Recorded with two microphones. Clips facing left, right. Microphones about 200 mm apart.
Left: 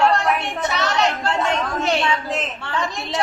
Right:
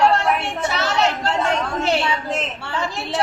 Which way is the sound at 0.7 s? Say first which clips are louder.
Even; 5° right (ahead or behind).